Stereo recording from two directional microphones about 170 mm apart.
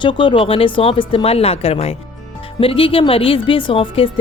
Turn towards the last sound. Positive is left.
turn(degrees=30)  # may be behind; listen again after turning